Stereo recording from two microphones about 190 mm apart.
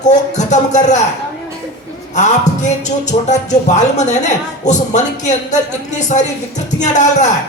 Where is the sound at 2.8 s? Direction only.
40° left (ahead or behind).